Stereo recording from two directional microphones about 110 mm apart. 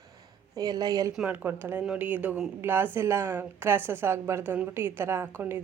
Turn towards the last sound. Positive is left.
turn(degrees=-15)  # may be behind; listen again after turning